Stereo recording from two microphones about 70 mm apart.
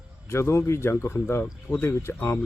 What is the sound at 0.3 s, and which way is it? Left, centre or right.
Speech, left.